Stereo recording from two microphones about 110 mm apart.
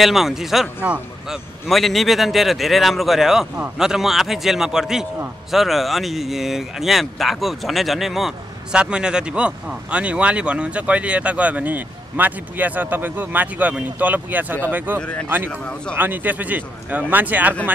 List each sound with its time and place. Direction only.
0.0 s a man's voice: centre (ahead or behind)
0.8 s speech: 15° right (ahead or behind)
1.7 s a man's voice: centre (ahead or behind); by 15.0 s 15° right (ahead or behind)
15.0 s speech: 10° left (ahead or behind)
15.2 s speech: 20° right (ahead or behind)